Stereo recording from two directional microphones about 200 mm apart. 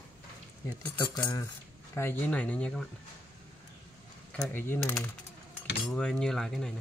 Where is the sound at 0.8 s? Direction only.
10° left (ahead or behind).